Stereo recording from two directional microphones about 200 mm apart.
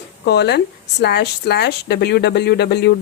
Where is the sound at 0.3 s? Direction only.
55° left (ahead or behind).